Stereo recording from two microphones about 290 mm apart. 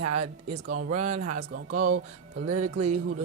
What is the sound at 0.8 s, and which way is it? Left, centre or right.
Speech, right.